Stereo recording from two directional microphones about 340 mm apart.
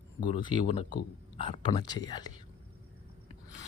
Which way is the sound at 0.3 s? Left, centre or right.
Centre.